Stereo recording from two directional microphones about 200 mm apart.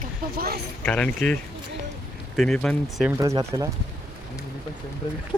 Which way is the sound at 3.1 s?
15° right (ahead or behind).